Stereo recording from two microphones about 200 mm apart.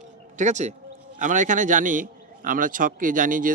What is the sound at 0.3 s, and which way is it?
A man's voice, 35° right (ahead or behind).